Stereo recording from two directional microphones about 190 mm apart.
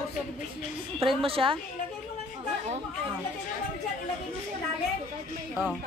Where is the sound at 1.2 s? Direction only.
30° right (ahead or behind).